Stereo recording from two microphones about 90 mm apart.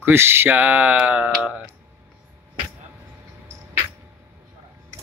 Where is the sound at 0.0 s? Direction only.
25° right (ahead or behind).